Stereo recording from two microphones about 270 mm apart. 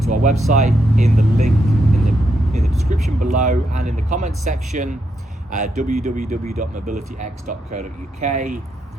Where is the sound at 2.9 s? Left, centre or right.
Right.